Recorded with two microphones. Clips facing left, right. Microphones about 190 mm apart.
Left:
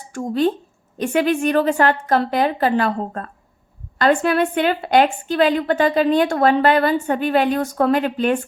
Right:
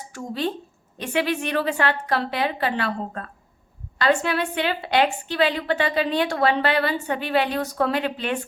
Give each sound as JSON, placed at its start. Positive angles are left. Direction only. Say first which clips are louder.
{"t": 0.1, "sound": "a woman's voice", "louder": "left 8 dB", "side_deg": 50}